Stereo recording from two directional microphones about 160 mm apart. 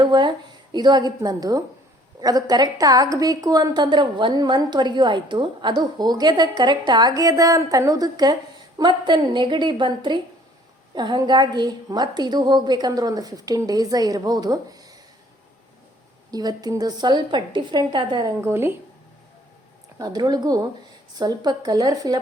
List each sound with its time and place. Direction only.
0.0 s a woman's voice: 30° right (ahead or behind)
16.3 s a woman's voice: 25° right (ahead or behind)
20.0 s a woman's voice: 25° right (ahead or behind)